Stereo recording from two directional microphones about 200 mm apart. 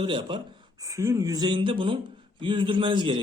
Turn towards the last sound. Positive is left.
turn(degrees=-25)  # may be behind; listen again after turning